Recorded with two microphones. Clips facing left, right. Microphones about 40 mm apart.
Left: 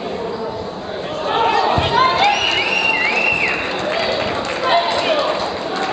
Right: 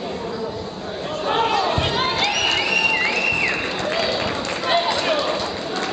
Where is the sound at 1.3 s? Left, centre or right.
Centre.